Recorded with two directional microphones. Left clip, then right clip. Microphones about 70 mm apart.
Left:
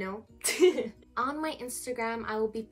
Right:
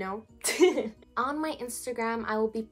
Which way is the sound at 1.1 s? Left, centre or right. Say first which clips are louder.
Right 2 dB; right.